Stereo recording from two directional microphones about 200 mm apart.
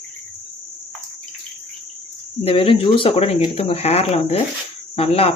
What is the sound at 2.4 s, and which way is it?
Speech, 30° left (ahead or behind).